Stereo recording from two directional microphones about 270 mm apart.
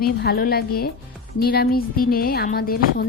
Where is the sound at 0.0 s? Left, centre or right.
Left.